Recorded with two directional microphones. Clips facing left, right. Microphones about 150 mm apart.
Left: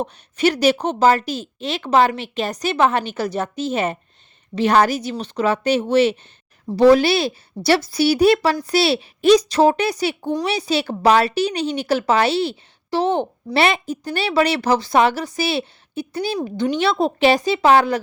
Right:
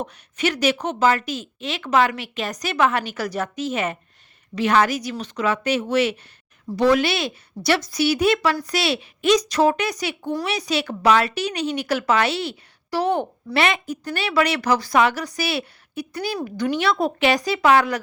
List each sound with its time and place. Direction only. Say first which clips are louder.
0.0 s a woman's voice: left 5 dB; 35° left (ahead or behind)